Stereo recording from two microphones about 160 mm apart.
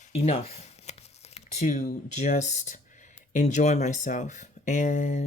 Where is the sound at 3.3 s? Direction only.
50° left (ahead or behind).